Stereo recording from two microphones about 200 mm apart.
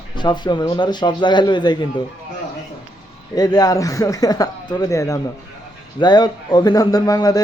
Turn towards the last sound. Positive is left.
turn(degrees=20)  # may be behind; listen again after turning